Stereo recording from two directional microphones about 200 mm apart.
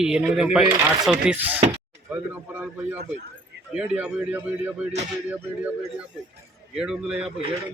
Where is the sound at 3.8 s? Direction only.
5° right (ahead or behind).